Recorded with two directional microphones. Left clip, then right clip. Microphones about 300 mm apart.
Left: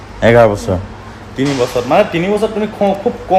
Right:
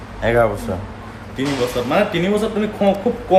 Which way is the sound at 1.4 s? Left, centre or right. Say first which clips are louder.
Left 5 dB; centre.